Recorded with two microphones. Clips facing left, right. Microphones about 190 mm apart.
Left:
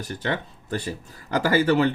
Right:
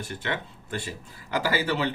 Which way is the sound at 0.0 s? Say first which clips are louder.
Left 4 dB; 40° left (ahead or behind).